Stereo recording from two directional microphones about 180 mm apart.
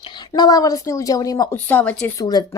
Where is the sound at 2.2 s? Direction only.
20° left (ahead or behind).